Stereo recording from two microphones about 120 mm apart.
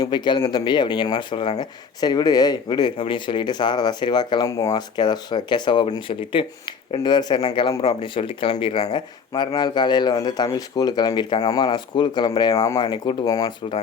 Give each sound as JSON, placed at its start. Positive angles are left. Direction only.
{"t": 0.0, "sound": "speech", "side_deg": 40}
{"t": 12.5, "sound": "speech", "side_deg": 25}
{"t": 12.8, "sound": "speech", "side_deg": 45}
{"t": 13.2, "sound": "speech", "side_deg": 30}